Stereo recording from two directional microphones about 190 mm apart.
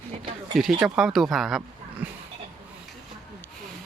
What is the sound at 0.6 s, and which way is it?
Speech, 5° right (ahead or behind).